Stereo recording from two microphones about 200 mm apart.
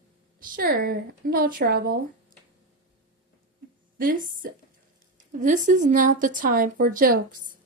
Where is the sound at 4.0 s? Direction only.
45° right (ahead or behind).